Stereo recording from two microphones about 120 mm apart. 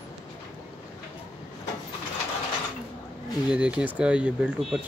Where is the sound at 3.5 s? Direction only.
10° right (ahead or behind).